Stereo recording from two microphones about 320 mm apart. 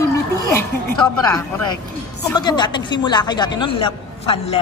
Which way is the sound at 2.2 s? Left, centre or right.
Centre.